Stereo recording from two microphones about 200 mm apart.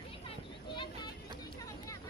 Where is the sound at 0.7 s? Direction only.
20° left (ahead or behind).